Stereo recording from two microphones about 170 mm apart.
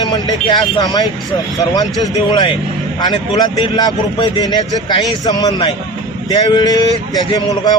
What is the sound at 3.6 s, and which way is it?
A man's voice, 25° left (ahead or behind).